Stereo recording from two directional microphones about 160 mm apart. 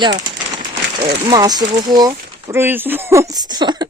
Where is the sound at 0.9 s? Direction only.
25° right (ahead or behind).